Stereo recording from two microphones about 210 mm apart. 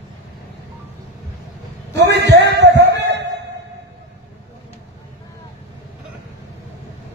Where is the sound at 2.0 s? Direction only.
55° right (ahead or behind).